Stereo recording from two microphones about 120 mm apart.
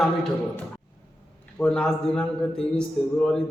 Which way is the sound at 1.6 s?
5° left (ahead or behind).